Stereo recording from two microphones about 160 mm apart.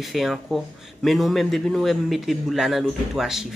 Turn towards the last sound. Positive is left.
turn(degrees=-5)  # may be behind; listen again after turning